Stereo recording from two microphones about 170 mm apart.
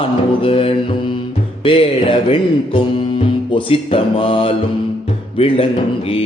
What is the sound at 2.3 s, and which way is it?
Speech, 30° left (ahead or behind).